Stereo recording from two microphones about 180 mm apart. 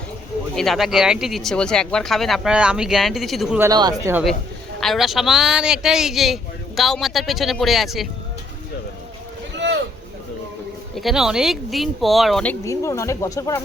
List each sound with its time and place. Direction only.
0.5 s speech: centre (ahead or behind)
3.6 s speech: 20° right (ahead or behind)
4.1 s speech: centre (ahead or behind)
10.9 s speech: centre (ahead or behind); by 13.6 s 15° left (ahead or behind)